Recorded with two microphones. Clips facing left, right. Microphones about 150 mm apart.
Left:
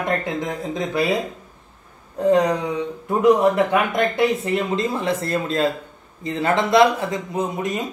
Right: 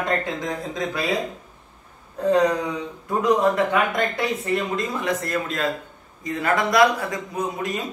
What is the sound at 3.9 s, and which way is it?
A man's voice, 25° left (ahead or behind).